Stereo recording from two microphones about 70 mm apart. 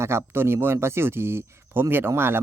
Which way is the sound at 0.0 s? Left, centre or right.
Right.